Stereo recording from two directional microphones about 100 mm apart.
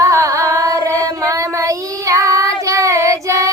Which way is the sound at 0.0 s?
30° right (ahead or behind).